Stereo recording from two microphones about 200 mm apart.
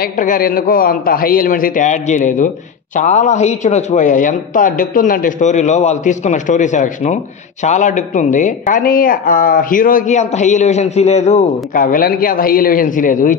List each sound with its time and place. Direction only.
0.0 s a man's voice: 45° left (ahead or behind)